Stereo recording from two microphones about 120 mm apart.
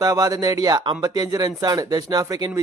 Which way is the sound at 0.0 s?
30° right (ahead or behind).